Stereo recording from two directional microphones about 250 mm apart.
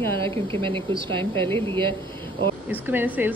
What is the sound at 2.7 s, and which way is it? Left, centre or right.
Speech, centre.